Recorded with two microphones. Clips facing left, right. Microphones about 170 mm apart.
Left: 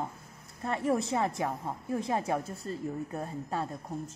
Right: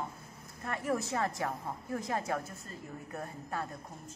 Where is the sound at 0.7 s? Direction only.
25° left (ahead or behind).